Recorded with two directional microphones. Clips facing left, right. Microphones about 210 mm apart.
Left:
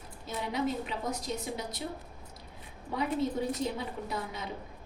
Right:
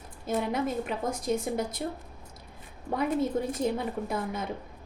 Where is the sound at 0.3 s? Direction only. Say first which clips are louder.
Right 4 dB; 50° right (ahead or behind).